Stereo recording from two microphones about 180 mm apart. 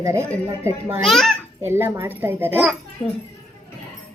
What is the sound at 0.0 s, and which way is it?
Speech, 15° right (ahead or behind).